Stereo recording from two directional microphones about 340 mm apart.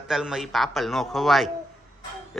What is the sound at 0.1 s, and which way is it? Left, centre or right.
A man's voice, centre.